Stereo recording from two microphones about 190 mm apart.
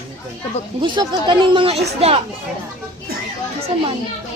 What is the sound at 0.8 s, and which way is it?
Speech, 25° right (ahead or behind).